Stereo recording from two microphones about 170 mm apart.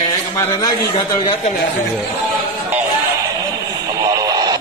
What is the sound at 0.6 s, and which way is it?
Speech, 20° left (ahead or behind).